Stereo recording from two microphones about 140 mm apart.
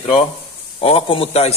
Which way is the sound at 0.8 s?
45° left (ahead or behind).